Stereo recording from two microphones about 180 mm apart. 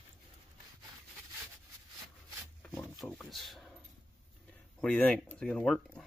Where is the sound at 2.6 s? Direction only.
5° left (ahead or behind).